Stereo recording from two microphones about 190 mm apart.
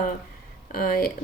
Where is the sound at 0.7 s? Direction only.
50° left (ahead or behind).